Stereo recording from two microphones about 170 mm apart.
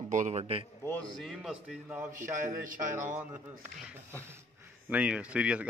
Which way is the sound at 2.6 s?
50° right (ahead or behind).